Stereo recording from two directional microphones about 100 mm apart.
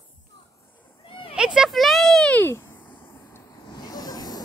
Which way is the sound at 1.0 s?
65° left (ahead or behind).